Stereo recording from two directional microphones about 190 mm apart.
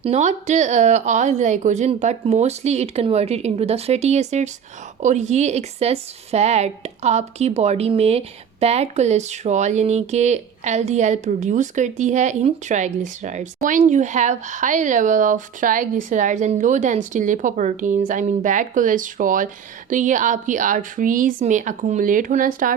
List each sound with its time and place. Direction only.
0.0 s speech: 35° right (ahead or behind)